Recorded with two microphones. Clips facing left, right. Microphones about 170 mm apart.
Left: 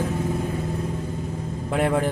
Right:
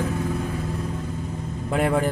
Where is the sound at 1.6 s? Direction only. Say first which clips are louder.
Even; 5° left (ahead or behind).